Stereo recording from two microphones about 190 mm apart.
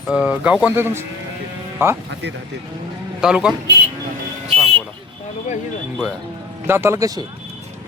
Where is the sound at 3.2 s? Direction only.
5° right (ahead or behind).